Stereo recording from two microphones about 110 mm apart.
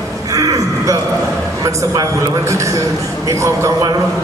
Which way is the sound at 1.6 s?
35° right (ahead or behind).